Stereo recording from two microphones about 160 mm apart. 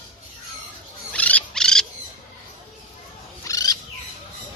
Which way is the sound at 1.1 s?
10° left (ahead or behind).